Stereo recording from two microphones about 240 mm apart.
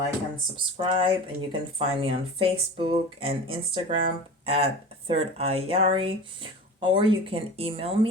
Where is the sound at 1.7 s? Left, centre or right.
Right.